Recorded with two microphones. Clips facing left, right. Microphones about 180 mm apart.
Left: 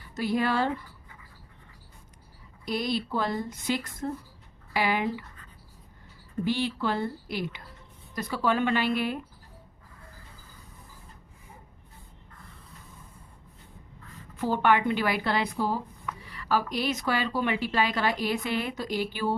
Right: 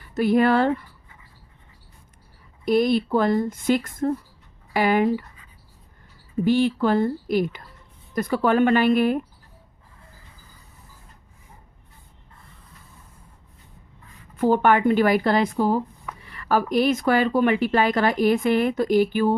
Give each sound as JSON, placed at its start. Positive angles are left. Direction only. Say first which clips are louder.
{"t": 0.1, "sound": "speech", "louder": "right 9 dB", "side_deg": -55}
{"t": 2.6, "sound": "a woman's voice", "louder": "right 10 dB", "side_deg": -50}
{"t": 6.4, "sound": "a woman's voice", "louder": "right 8 dB", "side_deg": -50}
{"t": 14.3, "sound": "a woman's voice", "louder": "right 6 dB", "side_deg": -50}